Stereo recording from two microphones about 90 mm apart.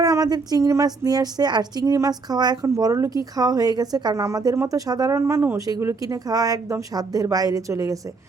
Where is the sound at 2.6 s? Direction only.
40° right (ahead or behind).